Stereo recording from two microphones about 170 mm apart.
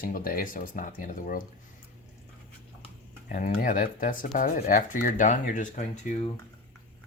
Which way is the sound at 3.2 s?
50° left (ahead or behind).